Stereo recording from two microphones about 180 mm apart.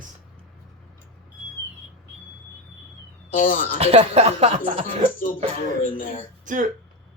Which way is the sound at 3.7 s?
35° right (ahead or behind).